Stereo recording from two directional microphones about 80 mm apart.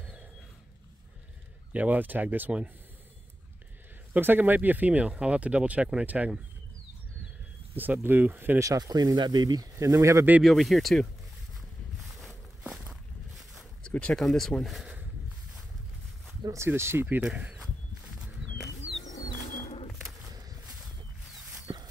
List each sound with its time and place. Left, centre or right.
1.7 s speech: centre
4.1 s speech: right
7.7 s speech: right
8.5 s speech: right
10.4 s speech: centre
12.6 s walk: centre
13.8 s speech: centre
16.4 s speech: right
17.2 s a sound: centre
18.6 s bird: centre
19.9 s a sound: centre
21.7 s a sound: right